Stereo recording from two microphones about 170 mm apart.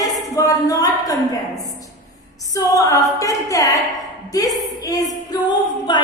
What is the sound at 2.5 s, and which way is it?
A capella, 20° left (ahead or behind).